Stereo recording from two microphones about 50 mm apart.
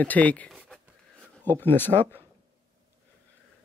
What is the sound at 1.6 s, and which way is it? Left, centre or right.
Speech, left.